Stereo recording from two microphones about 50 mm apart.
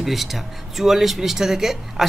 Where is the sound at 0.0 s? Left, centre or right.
Centre.